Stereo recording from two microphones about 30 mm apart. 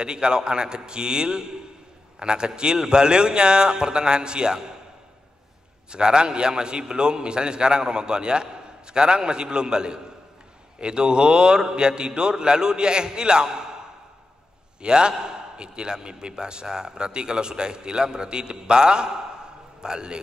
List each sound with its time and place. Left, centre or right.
0.0 s a man's voice: right
5.9 s a man's voice: right
14.8 s a man's voice: right